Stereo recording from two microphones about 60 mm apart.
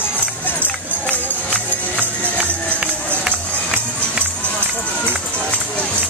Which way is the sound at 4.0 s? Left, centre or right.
Left.